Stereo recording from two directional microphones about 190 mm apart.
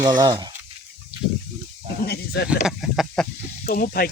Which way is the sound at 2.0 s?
55° left (ahead or behind).